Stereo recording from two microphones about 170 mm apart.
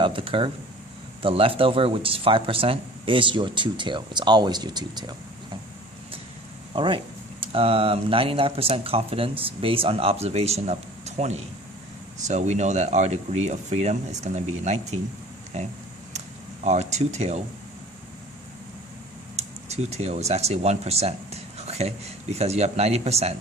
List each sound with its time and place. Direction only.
0.0 s speech: 30° right (ahead or behind)
6.7 s speech: 30° right (ahead or behind)
16.6 s speech: 40° right (ahead or behind)
19.4 s speech: 40° right (ahead or behind)